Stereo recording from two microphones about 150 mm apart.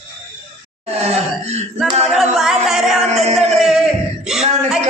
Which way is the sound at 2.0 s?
Centre (ahead or behind).